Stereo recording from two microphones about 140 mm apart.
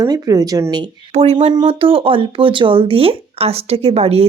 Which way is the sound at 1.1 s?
50° right (ahead or behind).